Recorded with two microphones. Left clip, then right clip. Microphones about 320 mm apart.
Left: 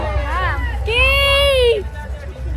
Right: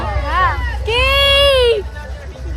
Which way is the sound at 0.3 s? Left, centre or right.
Right.